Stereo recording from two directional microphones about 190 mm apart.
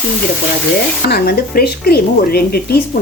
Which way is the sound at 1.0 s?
55° left (ahead or behind).